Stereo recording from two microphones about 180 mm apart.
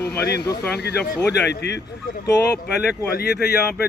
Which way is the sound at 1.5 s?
65° left (ahead or behind).